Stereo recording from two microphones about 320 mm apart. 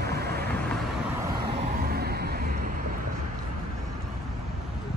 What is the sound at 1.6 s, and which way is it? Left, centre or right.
Vehicle, right.